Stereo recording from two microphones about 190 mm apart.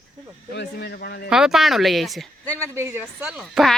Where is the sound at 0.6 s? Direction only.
60° left (ahead or behind).